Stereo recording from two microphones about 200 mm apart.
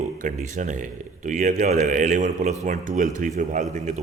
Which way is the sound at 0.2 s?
40° right (ahead or behind).